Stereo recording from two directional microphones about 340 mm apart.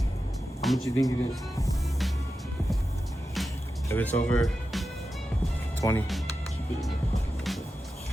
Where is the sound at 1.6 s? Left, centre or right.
Centre.